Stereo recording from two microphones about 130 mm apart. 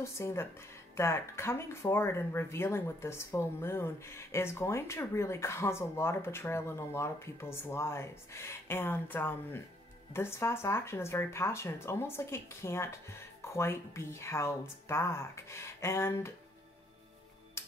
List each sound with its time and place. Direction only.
0.0 s speech: 20° left (ahead or behind)
17.6 s music: 20° left (ahead or behind)